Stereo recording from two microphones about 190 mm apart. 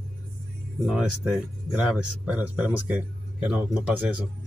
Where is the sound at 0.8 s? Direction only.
5° right (ahead or behind).